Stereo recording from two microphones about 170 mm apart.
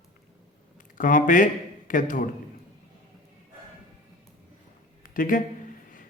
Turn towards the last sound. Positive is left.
turn(degrees=55)  # may be behind; listen again after turning